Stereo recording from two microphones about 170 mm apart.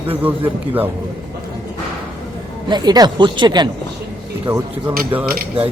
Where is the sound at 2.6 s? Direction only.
25° right (ahead or behind).